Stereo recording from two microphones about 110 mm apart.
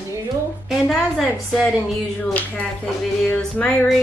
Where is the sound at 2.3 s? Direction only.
10° left (ahead or behind).